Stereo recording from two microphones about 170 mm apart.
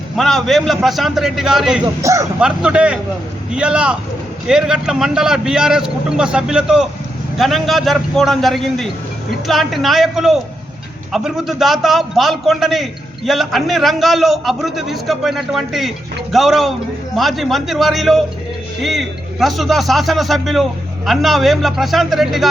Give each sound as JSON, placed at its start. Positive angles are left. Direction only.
{"t": 0.2, "sound": "a man's voice", "side_deg": 0}
{"t": 1.8, "sound": "speech", "side_deg": -15}
{"t": 2.4, "sound": "a man's voice", "side_deg": -5}